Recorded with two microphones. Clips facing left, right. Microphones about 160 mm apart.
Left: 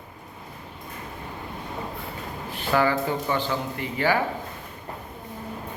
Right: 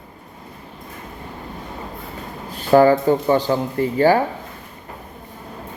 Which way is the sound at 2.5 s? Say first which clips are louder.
Right 10 dB; 40° right (ahead or behind).